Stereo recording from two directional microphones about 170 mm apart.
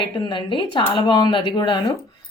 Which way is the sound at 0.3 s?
30° left (ahead or behind).